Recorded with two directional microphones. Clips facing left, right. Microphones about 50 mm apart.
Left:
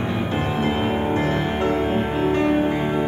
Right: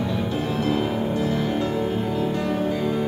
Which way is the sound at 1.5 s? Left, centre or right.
Left.